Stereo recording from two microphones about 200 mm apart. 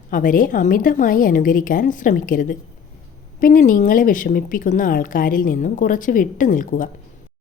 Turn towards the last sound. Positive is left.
turn(degrees=40)  # may be behind; listen again after turning